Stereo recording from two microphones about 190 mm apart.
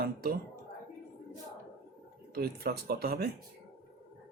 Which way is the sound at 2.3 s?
55° right (ahead or behind).